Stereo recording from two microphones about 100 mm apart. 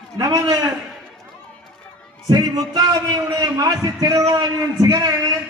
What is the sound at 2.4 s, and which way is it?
A man's voice, 40° right (ahead or behind).